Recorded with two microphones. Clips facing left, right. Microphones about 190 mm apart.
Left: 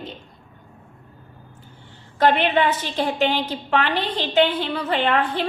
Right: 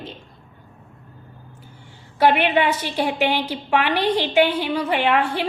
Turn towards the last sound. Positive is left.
turn(degrees=-10)  # may be behind; listen again after turning